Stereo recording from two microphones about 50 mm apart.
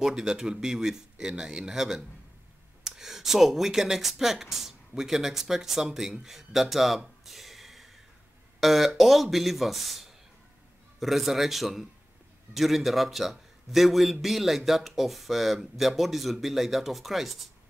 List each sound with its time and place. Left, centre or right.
0.0 s speech: centre
7.2 s a sound: centre
8.5 s speech: centre